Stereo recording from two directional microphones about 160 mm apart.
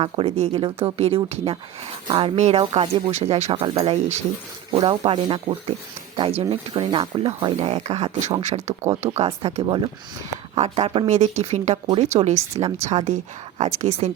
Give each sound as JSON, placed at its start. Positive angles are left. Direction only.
{"t": 0.0, "sound": "speech", "side_deg": -35}
{"t": 6.9, "sound": "speech", "side_deg": -25}
{"t": 9.6, "sound": "speech", "side_deg": -30}